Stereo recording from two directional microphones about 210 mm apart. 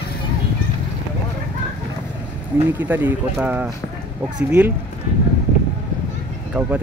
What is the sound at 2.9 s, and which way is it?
Speech, 10° right (ahead or behind).